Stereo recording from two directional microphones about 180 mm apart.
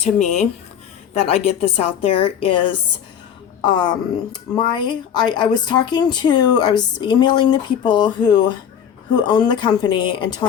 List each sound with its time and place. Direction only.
0.0 s a woman's voice: 40° left (ahead or behind); by 10.4 s 25° left (ahead or behind)